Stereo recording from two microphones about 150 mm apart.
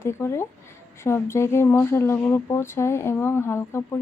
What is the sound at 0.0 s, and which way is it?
Speech, 15° left (ahead or behind).